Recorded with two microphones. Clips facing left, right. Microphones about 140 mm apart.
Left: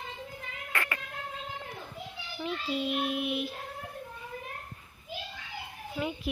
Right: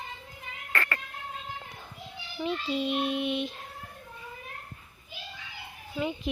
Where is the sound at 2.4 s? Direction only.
Centre (ahead or behind).